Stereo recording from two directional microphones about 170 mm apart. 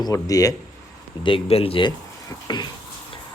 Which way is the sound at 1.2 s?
30° left (ahead or behind).